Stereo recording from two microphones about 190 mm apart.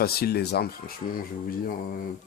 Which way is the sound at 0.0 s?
55° left (ahead or behind).